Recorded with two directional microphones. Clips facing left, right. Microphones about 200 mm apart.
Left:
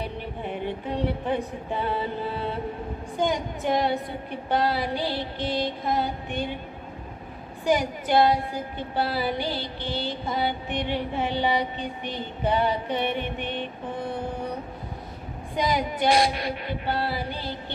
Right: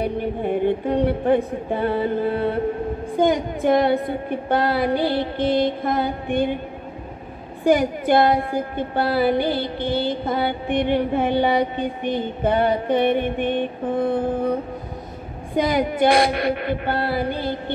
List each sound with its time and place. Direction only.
0.0 s a woman's voice: 50° right (ahead or behind)
7.6 s a woman's voice: 55° right (ahead or behind)
15.5 s a woman's voice: 55° right (ahead or behind)